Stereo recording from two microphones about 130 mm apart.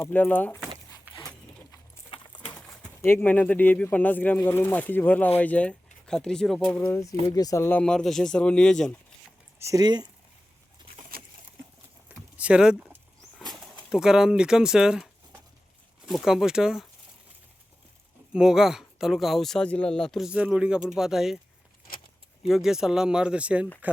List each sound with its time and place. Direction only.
0.1 s speech: 10° left (ahead or behind)
2.0 s a sound: 45° left (ahead or behind)
2.5 s bird: 5° left (ahead or behind)
3.0 s speech: 15° left (ahead or behind)
7.3 s speech: 30° left (ahead or behind); by 9.0 s 5° left (ahead or behind)
9.6 s speech: 25° right (ahead or behind)
12.0 s a sound: 10° right (ahead or behind)
13.5 s speech: centre (ahead or behind)
18.3 s speech: 5° right (ahead or behind)
22.4 s speech: centre (ahead or behind)